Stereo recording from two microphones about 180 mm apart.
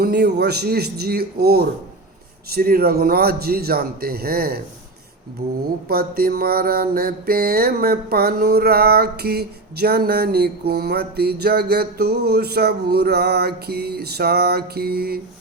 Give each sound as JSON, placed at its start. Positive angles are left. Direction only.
{"t": 0.0, "sound": "mantra", "side_deg": -65}